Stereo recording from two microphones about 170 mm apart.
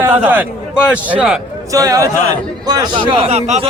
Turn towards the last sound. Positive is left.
turn(degrees=-40)  # may be behind; listen again after turning